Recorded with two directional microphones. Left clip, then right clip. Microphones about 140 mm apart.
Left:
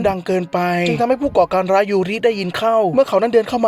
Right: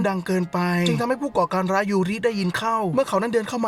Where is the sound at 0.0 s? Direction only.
15° left (ahead or behind).